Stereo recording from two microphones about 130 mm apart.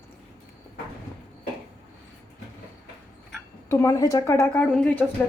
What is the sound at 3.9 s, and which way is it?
Speech, 25° left (ahead or behind).